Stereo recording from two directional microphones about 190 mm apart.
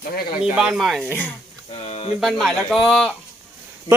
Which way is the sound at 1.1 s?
10° left (ahead or behind).